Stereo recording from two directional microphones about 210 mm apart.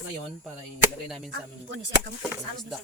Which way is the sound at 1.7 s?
55° right (ahead or behind).